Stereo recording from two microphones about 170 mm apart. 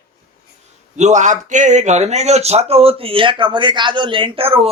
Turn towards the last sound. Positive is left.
turn(degrees=-35)  # may be behind; listen again after turning